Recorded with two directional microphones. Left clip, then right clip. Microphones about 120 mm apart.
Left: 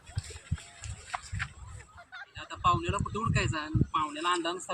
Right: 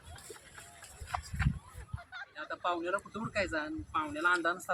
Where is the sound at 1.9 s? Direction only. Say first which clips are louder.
Even; centre (ahead or behind).